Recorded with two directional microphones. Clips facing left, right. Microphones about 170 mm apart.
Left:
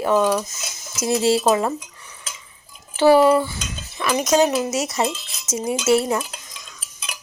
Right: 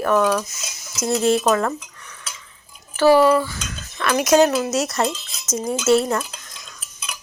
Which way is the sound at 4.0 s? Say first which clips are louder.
Right 1 dB; 5° left (ahead or behind).